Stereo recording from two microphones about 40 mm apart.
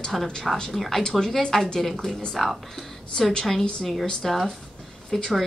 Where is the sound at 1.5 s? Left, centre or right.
Centre.